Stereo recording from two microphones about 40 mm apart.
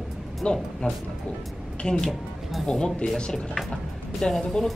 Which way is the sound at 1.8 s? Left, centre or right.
Left.